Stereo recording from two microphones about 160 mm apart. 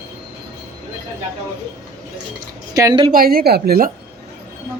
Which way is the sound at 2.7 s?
20° right (ahead or behind).